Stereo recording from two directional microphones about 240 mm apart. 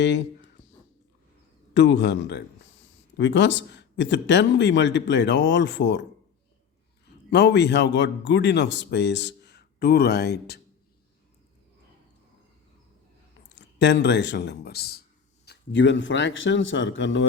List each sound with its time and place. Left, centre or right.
1.7 s speech: left
7.3 s speech: left
13.6 s speech: left